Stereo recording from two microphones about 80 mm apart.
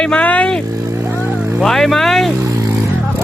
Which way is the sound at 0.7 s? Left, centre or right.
Right.